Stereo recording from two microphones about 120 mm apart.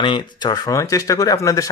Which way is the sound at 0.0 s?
40° left (ahead or behind).